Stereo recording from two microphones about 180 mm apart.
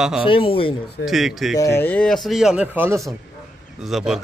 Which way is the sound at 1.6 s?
15° left (ahead or behind).